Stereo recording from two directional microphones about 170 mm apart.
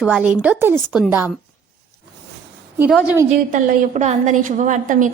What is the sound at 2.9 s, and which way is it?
Speech, 5° right (ahead or behind).